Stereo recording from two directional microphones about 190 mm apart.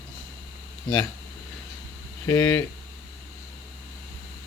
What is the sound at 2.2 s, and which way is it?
Speech, 15° left (ahead or behind).